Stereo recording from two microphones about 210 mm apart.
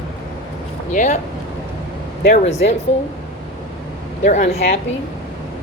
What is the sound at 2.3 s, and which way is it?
Speech, 30° left (ahead or behind).